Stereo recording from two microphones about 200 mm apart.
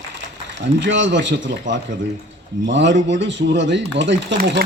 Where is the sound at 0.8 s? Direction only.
65° right (ahead or behind).